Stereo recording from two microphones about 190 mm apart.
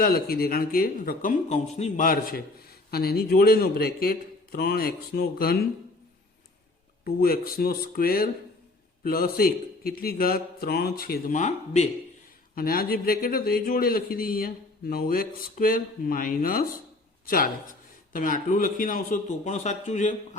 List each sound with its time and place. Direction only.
0.0 s speech: 50° left (ahead or behind)
1.5 s speech: 35° left (ahead or behind); by 5.5 s 55° left (ahead or behind)
7.0 s speech: 50° left (ahead or behind)
12.5 s speech: 50° left (ahead or behind)